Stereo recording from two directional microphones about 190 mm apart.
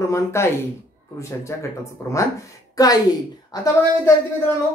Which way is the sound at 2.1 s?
15° left (ahead or behind).